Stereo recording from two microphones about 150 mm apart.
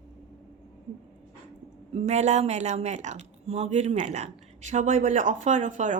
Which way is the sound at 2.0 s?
50° right (ahead or behind).